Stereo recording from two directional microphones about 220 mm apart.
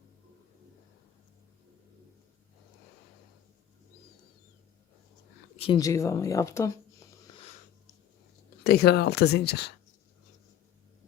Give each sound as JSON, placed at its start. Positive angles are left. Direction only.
{"t": 5.5, "sound": "speech", "side_deg": 25}
{"t": 8.6, "sound": "speech", "side_deg": 45}